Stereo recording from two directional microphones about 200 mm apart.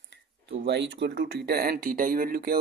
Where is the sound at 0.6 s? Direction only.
60° right (ahead or behind).